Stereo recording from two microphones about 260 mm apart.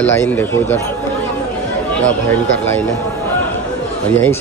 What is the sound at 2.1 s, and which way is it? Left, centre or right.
Speech, centre.